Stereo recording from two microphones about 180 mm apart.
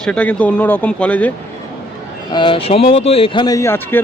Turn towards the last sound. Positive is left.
turn(degrees=10)  # may be behind; listen again after turning